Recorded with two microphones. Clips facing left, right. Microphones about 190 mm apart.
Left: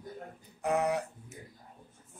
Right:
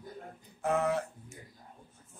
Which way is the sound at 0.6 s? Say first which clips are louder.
Even; 15° left (ahead or behind).